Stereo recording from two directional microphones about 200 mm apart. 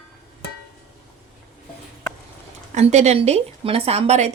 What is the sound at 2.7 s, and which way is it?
Speech, 35° right (ahead or behind).